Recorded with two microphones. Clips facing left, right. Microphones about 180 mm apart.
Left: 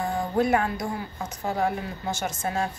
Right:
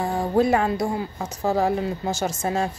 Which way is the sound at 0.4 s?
25° right (ahead or behind).